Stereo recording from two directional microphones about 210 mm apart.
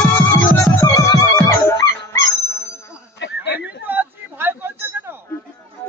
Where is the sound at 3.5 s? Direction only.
10° right (ahead or behind).